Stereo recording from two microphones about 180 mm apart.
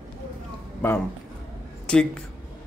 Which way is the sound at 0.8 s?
10° left (ahead or behind).